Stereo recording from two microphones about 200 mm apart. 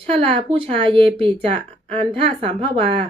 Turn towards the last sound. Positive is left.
turn(degrees=-25)  # may be behind; listen again after turning